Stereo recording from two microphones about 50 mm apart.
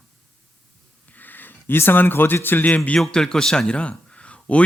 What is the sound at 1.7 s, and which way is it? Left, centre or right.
Speech, left.